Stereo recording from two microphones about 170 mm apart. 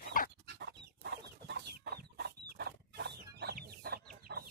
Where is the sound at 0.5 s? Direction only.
75° right (ahead or behind).